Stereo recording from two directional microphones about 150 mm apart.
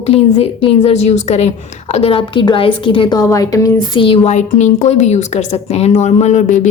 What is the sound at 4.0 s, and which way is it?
Speech, 35° left (ahead or behind).